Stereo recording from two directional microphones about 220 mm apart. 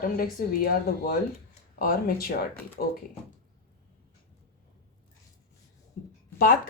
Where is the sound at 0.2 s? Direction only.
45° left (ahead or behind).